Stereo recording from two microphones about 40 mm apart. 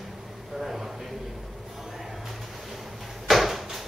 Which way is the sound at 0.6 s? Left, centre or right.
Centre.